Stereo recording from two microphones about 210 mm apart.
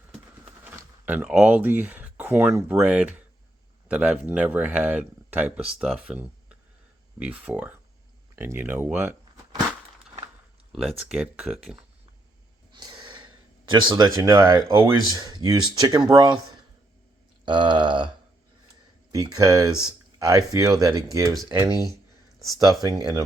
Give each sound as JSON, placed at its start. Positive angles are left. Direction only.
{"t": 0.6, "sound": "speech", "side_deg": -10}
{"t": 10.7, "sound": "speech", "side_deg": 0}
{"t": 12.7, "sound": "a sound", "side_deg": -20}
{"t": 14.2, "sound": "speech", "side_deg": -15}
{"t": 17.4, "sound": "speech", "side_deg": -20}
{"t": 19.1, "sound": "speech", "side_deg": -15}
{"t": 22.4, "sound": "speech", "side_deg": 0}
{"t": 22.9, "sound": "speech", "side_deg": -15}